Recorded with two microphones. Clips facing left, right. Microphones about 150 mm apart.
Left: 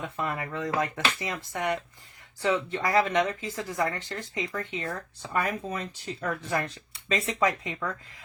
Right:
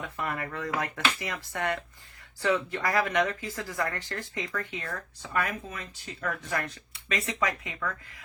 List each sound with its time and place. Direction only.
0.2 s speech: 20° left (ahead or behind)